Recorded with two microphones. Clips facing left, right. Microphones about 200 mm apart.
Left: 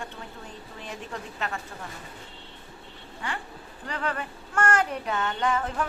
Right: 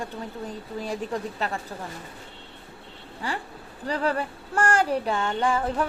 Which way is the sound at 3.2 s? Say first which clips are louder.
Right 3 dB; 35° right (ahead or behind).